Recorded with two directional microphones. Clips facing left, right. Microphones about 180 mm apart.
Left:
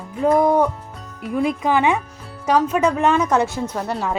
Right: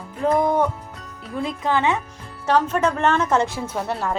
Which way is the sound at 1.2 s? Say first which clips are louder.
Left 6 dB; 15° left (ahead or behind).